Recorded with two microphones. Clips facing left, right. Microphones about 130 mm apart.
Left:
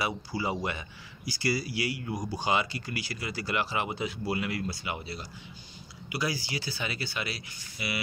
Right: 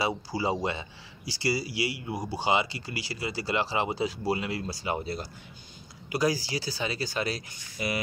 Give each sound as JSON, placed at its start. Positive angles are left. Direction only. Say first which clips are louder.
{"t": 0.0, "sound": "speech", "louder": "right 3 dB", "side_deg": -30}